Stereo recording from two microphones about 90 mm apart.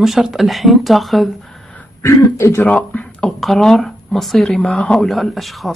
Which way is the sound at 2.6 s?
15° left (ahead or behind).